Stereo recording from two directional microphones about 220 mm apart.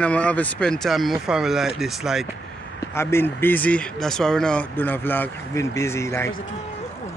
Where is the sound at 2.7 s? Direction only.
10° left (ahead or behind).